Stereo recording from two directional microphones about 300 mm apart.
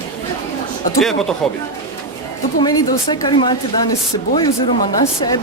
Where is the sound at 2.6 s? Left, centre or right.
Centre.